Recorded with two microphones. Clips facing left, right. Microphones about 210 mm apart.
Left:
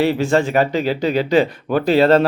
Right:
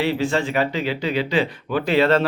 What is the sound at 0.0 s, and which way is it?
Speech, 45° left (ahead or behind).